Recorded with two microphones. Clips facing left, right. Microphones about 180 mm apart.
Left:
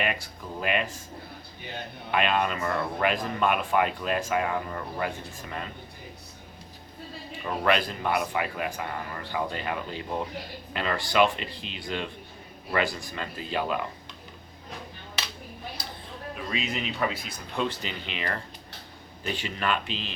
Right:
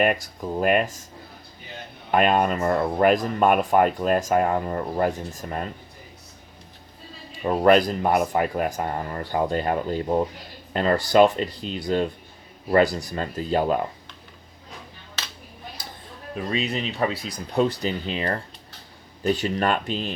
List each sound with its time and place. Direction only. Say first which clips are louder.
0.0 s speech: right 9 dB; 45° right (ahead or behind)
2.1 s speech: right 6 dB; 45° right (ahead or behind)
7.4 s speech: right 8 dB; 40° right (ahead or behind)
16.3 s speech: right 6 dB; 35° right (ahead or behind)